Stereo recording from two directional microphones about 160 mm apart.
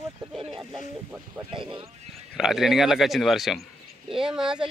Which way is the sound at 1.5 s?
30° right (ahead or behind).